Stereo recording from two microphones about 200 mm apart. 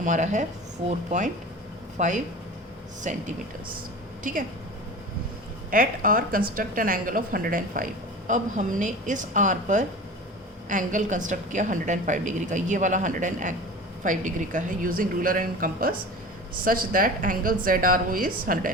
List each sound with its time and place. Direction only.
0.0 s a woman's voice: 40° right (ahead or behind)
5.7 s a woman's voice: 45° right (ahead or behind)